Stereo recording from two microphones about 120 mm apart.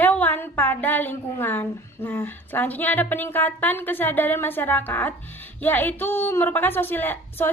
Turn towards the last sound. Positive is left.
turn(degrees=15)  # may be behind; listen again after turning